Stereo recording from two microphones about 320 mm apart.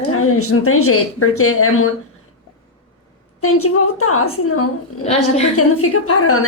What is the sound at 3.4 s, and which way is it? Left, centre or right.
Speech, left.